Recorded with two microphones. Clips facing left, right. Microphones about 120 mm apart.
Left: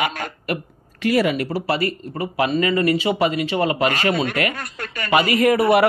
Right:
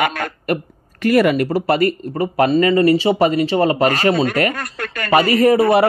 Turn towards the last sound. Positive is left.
turn(degrees=-30)  # may be behind; listen again after turning